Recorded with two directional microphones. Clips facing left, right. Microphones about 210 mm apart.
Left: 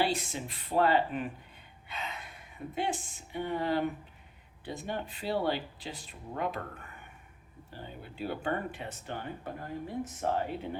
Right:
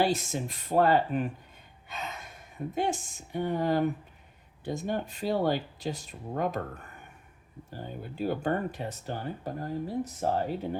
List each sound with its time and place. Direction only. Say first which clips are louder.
0.0 s speech: right 4 dB; 45° right (ahead or behind)
7.7 s speech: right 5 dB; 45° right (ahead or behind)